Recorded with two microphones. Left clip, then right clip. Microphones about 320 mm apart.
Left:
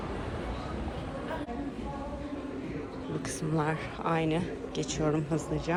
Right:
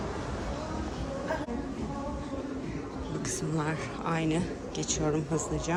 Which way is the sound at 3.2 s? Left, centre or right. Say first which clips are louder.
Left 1 dB; centre.